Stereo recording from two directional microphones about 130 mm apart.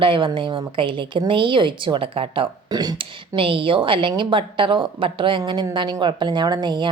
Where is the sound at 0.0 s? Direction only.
40° right (ahead or behind).